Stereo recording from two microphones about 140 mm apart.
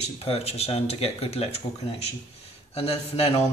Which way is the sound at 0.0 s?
45° left (ahead or behind).